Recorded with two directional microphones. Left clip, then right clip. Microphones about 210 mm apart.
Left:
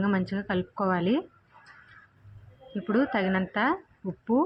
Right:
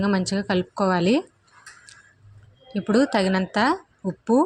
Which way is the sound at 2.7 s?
35° right (ahead or behind).